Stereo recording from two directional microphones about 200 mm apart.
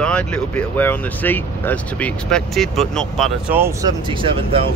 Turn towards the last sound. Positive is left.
turn(degrees=-25)  # may be behind; listen again after turning